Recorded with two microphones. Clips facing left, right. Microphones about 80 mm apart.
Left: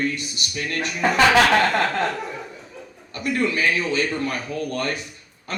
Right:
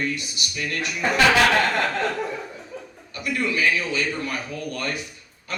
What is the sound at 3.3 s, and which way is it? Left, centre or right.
A man's voice, left.